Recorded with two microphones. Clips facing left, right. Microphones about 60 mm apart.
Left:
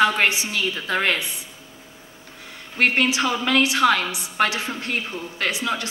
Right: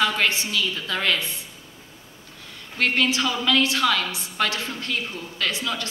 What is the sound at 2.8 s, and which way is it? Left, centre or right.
A woman's voice, left.